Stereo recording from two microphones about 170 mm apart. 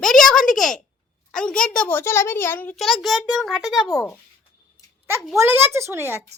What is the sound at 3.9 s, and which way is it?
Speech, 20° left (ahead or behind).